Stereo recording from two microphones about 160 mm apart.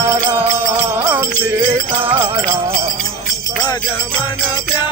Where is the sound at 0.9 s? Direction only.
15° right (ahead or behind).